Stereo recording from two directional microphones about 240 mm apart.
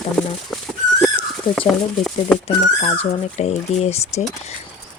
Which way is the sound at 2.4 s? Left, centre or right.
Left.